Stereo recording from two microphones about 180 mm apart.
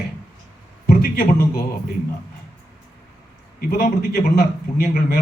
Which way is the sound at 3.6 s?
55° left (ahead or behind).